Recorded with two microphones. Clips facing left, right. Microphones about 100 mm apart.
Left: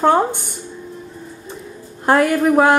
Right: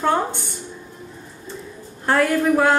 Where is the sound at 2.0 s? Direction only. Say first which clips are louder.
Left 4 dB; 15° left (ahead or behind).